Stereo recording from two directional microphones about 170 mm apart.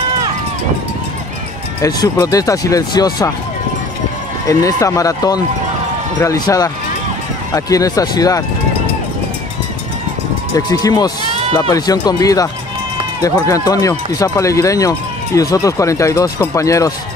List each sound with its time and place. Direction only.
1.8 s speech: 20° left (ahead or behind)
4.5 s speech: 20° left (ahead or behind)
10.5 s speech: 20° left (ahead or behind)
13.5 s speech: 20° left (ahead or behind)